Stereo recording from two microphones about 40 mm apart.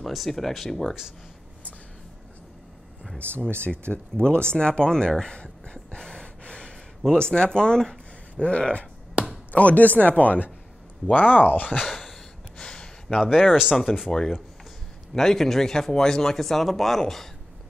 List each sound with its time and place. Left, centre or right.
0.0 s speech: centre
3.2 s speech: left; by 8.5 s centre
8.5 s speech: left
11.8 s a sound: centre
12.5 s a sound: left
13.3 s speech: centre
13.9 s speech: left
15.1 s speech: centre